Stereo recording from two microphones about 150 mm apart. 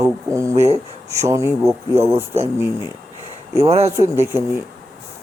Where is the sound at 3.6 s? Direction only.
45° right (ahead or behind).